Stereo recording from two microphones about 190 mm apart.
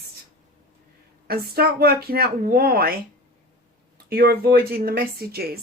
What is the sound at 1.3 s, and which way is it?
Speech, 55° right (ahead or behind).